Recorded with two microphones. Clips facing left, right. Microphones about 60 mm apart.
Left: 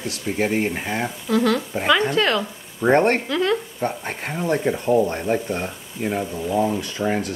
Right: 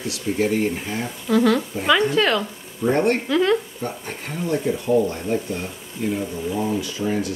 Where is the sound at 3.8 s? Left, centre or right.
Left.